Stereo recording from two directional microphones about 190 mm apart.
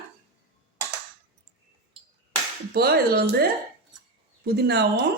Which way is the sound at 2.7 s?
55° right (ahead or behind).